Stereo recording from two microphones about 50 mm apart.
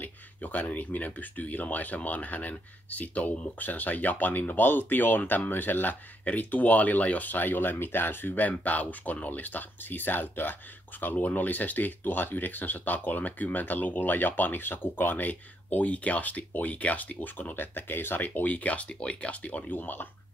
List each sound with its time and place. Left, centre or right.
0.0 s speech: left